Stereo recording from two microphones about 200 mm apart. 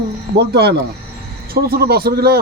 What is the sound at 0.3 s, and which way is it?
A man's voice, 55° right (ahead or behind).